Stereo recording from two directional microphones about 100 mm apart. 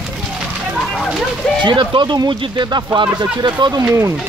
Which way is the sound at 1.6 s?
50° right (ahead or behind).